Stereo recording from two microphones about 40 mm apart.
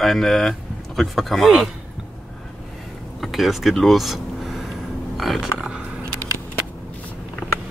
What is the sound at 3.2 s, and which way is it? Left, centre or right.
Speech, centre.